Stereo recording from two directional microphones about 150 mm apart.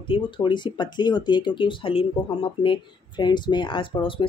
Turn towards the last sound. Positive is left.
turn(degrees=35)  # may be behind; listen again after turning